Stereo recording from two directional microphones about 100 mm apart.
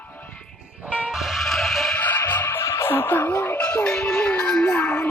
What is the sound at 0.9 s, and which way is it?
Music, 15° right (ahead or behind).